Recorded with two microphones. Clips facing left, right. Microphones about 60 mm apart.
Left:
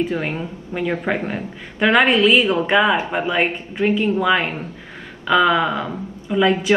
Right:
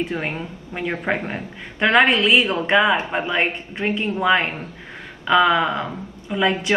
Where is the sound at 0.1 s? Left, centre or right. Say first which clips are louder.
Left 2 dB; centre.